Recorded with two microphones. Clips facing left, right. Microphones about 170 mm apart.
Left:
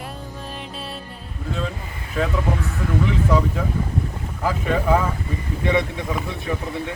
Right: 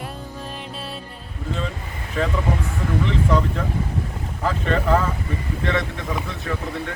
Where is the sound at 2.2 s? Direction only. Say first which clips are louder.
Even; 5° left (ahead or behind).